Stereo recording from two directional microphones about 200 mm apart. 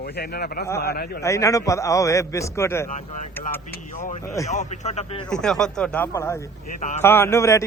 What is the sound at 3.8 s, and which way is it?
Speech, 40° left (ahead or behind).